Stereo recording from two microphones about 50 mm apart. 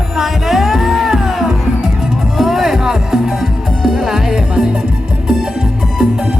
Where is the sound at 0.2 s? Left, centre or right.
Centre.